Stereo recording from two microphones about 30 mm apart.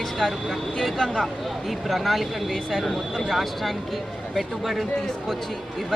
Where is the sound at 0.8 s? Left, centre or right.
Centre.